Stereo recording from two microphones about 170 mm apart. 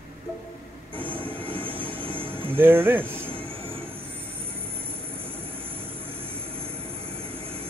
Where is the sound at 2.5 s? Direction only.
10° right (ahead or behind).